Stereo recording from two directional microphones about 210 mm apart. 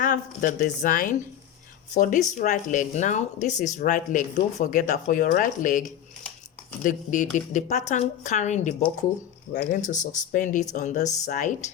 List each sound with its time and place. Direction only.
0.0 s speech: 40° left (ahead or behind)